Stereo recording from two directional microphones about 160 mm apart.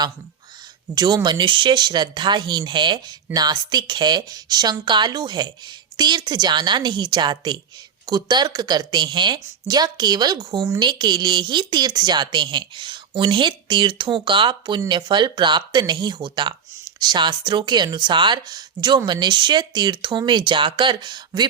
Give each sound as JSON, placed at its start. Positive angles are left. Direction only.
{"t": 0.9, "sound": "a woman's voice", "side_deg": -25}